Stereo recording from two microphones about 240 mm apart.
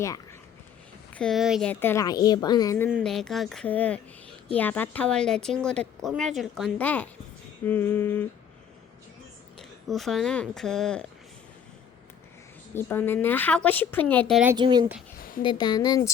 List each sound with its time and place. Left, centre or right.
1.1 s a woman's voice: centre
9.6 s speech: centre
12.7 s speech: centre
14.5 s speech: centre
15.4 s speech: centre